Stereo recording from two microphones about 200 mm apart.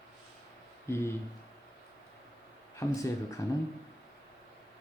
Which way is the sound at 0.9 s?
10° left (ahead or behind).